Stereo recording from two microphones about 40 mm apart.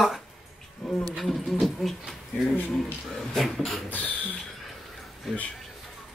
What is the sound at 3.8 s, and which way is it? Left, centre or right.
Speech, left.